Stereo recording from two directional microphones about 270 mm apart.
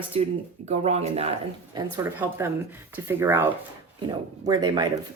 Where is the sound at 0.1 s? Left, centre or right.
Right.